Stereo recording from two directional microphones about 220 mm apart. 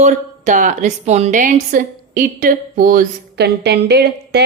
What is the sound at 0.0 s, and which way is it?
A woman's voice, 35° right (ahead or behind).